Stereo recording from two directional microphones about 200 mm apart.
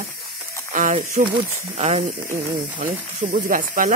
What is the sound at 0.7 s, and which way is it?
Speech, 40° right (ahead or behind).